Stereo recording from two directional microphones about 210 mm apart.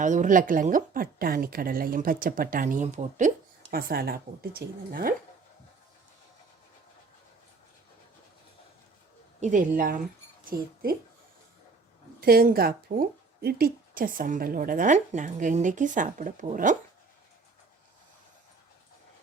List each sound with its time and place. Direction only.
0.0 s speech: 35° right (ahead or behind)
3.7 s speech: 45° right (ahead or behind)
9.4 s speech: 35° right (ahead or behind)
12.2 s speech: 45° right (ahead or behind)